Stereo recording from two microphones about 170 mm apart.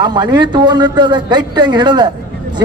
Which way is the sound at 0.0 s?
25° right (ahead or behind).